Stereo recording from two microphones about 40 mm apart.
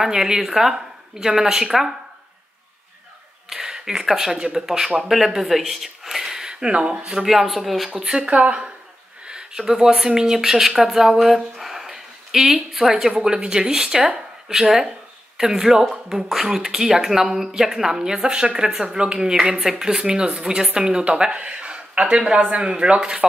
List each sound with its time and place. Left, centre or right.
0.0 s speech: centre
3.4 s speech: centre
7.2 s speech: centre
7.9 s speech: centre
8.4 s speech: right; by 10.7 s centre
10.8 s a sound: centre
12.7 s speech: centre